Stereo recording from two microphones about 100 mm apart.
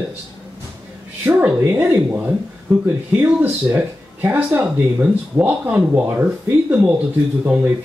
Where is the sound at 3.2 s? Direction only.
20° right (ahead or behind).